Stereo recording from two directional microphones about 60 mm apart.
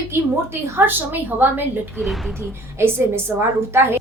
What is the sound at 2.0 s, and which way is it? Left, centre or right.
Speech, centre.